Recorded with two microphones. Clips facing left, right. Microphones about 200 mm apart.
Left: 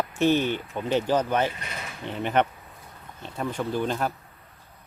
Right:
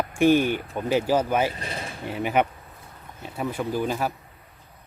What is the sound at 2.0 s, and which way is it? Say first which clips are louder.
Speech: right 1 dB; 10° right (ahead or behind).